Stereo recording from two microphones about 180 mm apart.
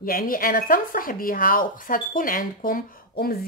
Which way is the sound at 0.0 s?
50° left (ahead or behind).